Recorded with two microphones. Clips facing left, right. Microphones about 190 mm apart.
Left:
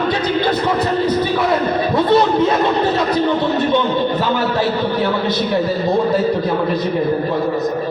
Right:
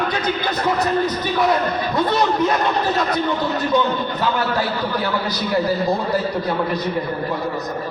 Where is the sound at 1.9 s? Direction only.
25° left (ahead or behind).